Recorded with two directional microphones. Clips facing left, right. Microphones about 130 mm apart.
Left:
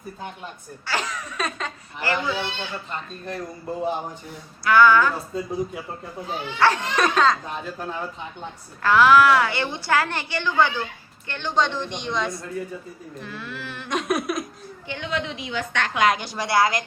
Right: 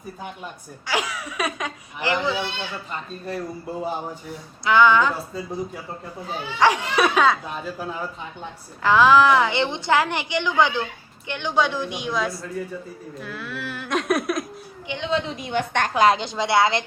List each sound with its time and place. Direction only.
0.9 s a woman's voice: 10° right (ahead or behind)
4.6 s a woman's voice: 20° right (ahead or behind)
5.3 s speech: centre (ahead or behind)
6.6 s a woman's voice: 10° right (ahead or behind)
8.8 s a woman's voice: 15° right (ahead or behind); by 14.4 s centre (ahead or behind)
14.8 s a woman's voice: 20° right (ahead or behind)
15.3 s a woman's voice: 50° right (ahead or behind)
16.0 s a woman's voice: 30° right (ahead or behind)